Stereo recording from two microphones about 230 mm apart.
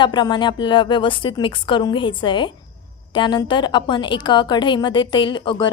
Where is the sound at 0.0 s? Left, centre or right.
Centre.